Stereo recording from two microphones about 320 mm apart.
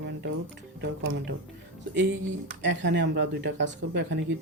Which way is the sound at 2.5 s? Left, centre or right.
Right.